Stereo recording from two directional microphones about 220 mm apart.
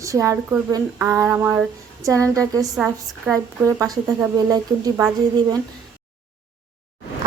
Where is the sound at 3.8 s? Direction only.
15° right (ahead or behind).